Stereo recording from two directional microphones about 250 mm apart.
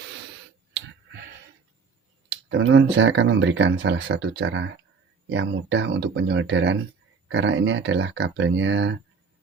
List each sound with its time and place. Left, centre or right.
2.5 s speech: right